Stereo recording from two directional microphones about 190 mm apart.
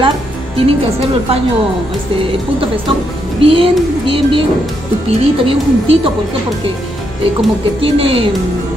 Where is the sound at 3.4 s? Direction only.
30° right (ahead or behind).